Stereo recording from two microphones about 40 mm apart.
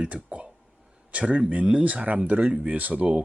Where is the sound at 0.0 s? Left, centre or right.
Right.